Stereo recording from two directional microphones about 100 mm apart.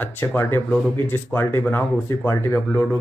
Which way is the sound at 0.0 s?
20° left (ahead or behind).